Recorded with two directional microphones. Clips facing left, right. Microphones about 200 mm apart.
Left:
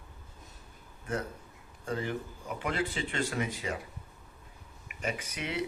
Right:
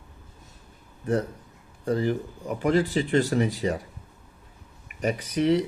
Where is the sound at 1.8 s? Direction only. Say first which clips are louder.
Right 9 dB; 35° right (ahead or behind).